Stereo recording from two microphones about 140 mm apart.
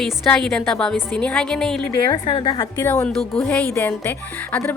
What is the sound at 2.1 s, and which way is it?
Speech, 35° left (ahead or behind).